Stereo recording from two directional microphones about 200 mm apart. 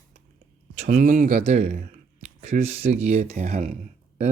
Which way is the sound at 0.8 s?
35° right (ahead or behind).